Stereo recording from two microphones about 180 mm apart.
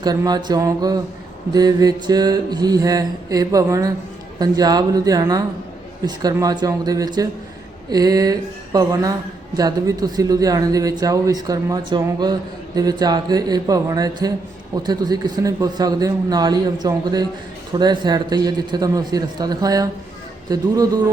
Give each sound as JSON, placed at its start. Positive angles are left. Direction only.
{"t": 0.0, "sound": "speech", "side_deg": -20}